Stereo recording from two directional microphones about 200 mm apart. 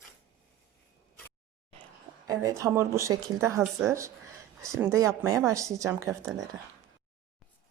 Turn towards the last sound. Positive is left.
turn(degrees=-15)  # may be behind; listen again after turning